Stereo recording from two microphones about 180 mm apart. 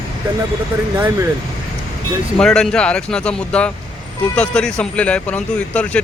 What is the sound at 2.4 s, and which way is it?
A man's voice, 5° left (ahead or behind).